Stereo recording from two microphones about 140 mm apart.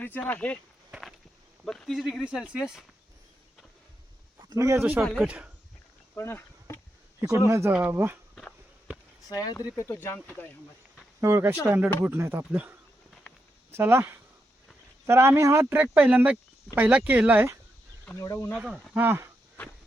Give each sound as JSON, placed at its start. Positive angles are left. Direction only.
{"t": 0.0, "sound": "speech", "side_deg": 15}
{"t": 0.9, "sound": "walk", "side_deg": -5}
{"t": 1.6, "sound": "speech", "side_deg": 5}
{"t": 4.4, "sound": "a man's voice", "side_deg": -20}
{"t": 5.0, "sound": "speech", "side_deg": -5}
{"t": 6.1, "sound": "insect", "side_deg": 15}
{"t": 7.4, "sound": "speech", "side_deg": -20}
{"t": 9.3, "sound": "speech", "side_deg": 30}
{"t": 11.2, "sound": "speech", "side_deg": -20}
{"t": 18.2, "sound": "speech", "side_deg": 20}
{"t": 18.5, "sound": "speech", "side_deg": -10}